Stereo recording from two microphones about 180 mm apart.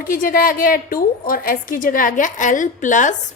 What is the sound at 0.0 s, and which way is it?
A woman's voice, 50° left (ahead or behind).